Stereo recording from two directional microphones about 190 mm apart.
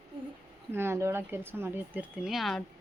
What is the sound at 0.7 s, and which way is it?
Speech, 10° right (ahead or behind).